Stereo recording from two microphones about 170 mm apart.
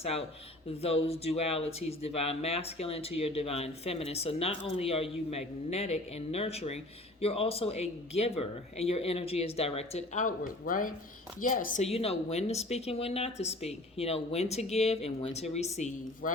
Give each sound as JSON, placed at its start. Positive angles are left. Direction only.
{"t": 0.0, "sound": "a woman's voice", "side_deg": 35}
{"t": 11.9, "sound": "speech", "side_deg": 35}